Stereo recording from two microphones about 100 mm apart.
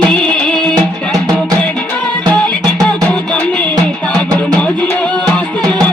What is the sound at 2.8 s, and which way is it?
Music, 10° left (ahead or behind).